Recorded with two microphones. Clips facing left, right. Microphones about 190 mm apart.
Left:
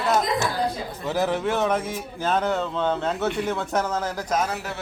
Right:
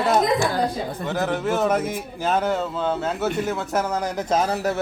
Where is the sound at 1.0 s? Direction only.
Centre (ahead or behind).